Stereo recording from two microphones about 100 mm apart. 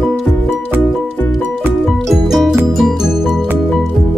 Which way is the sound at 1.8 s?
Centre (ahead or behind).